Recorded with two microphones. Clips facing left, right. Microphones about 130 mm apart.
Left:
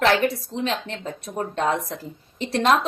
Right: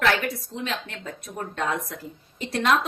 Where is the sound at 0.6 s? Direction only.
30° left (ahead or behind).